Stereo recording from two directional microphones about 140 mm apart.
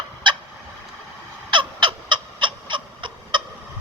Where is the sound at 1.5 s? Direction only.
35° right (ahead or behind).